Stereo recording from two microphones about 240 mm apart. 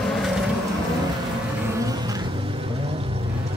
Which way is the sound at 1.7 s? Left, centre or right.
Centre.